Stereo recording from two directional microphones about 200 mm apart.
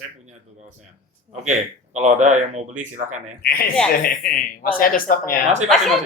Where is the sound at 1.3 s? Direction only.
35° right (ahead or behind).